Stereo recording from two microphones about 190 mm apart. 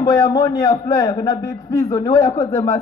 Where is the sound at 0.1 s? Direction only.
15° left (ahead or behind).